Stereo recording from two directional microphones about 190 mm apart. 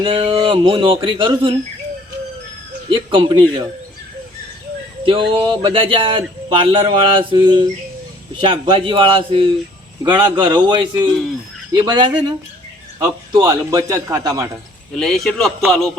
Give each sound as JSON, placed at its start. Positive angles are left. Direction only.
{"t": 0.0, "sound": "speech", "side_deg": -25}
{"t": 2.9, "sound": "speech", "side_deg": -25}
{"t": 5.0, "sound": "a man's voice", "side_deg": -25}
{"t": 14.9, "sound": "a man's voice", "side_deg": 0}